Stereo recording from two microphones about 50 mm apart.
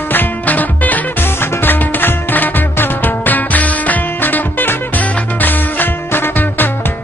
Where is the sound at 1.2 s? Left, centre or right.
Left.